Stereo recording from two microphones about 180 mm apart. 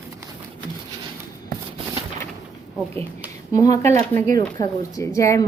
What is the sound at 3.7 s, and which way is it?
A woman's voice, 15° left (ahead or behind).